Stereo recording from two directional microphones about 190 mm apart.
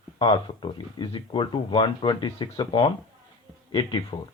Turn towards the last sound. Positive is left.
turn(degrees=25)  # may be behind; listen again after turning